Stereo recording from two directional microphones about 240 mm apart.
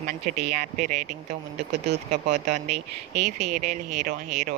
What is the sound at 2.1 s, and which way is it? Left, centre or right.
Speech, right.